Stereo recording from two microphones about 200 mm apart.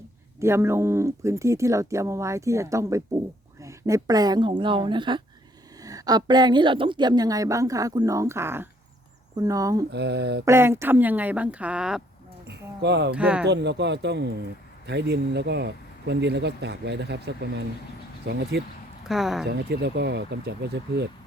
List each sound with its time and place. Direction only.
0.3 s a woman's voice: 15° right (ahead or behind)
9.9 s speech: 55° right (ahead or behind)
10.4 s a woman's voice: 10° right (ahead or behind)
12.5 s speech: 60° right (ahead or behind)
13.1 s speech: 5° right (ahead or behind)
13.4 s speech: 60° right (ahead or behind)
19.0 s speech: centre (ahead or behind)
19.5 s speech: 55° right (ahead or behind)